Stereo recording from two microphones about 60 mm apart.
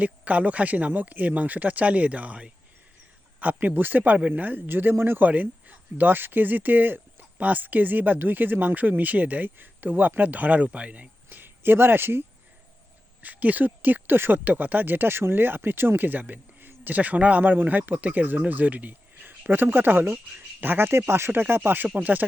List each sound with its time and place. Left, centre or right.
0.0 s speech: right
11.3 s speech: right
13.2 s speech: right
21.8 s speech: right